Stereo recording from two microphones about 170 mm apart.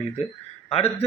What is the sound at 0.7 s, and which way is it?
Speech, 35° left (ahead or behind).